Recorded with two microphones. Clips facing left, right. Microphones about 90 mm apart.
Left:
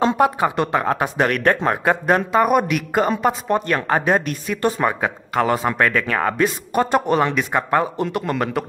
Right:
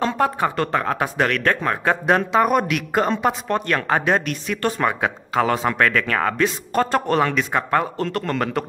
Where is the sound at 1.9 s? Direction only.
Centre (ahead or behind).